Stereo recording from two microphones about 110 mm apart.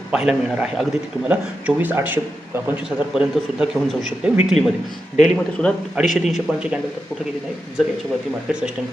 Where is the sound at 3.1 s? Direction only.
5° right (ahead or behind).